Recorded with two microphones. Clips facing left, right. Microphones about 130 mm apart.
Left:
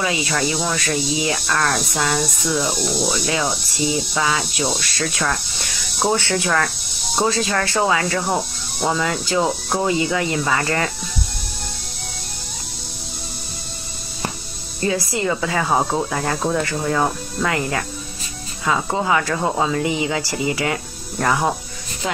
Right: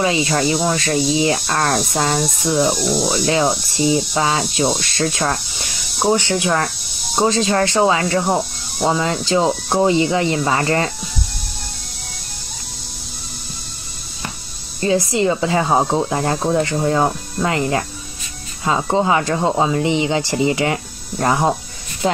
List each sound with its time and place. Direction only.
0.0 s speech: 30° right (ahead or behind)
14.8 s speech: 25° right (ahead or behind)